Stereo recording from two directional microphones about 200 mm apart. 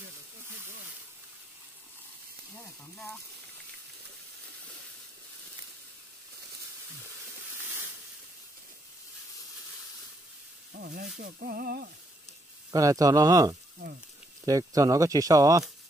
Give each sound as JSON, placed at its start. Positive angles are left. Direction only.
{"t": 2.5, "sound": "a sound", "side_deg": 5}
{"t": 10.7, "sound": "speech", "side_deg": -45}
{"t": 11.1, "sound": "music", "side_deg": -45}
{"t": 12.7, "sound": "speech", "side_deg": -15}